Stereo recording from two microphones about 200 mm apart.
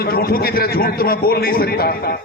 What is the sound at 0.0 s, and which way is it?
A man's voice, 50° left (ahead or behind).